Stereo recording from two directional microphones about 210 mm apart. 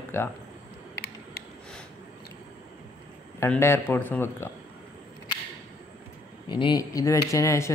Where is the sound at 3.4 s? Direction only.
10° left (ahead or behind).